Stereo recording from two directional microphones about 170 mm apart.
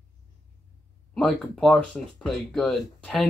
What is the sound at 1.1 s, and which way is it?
Speech, centre (ahead or behind).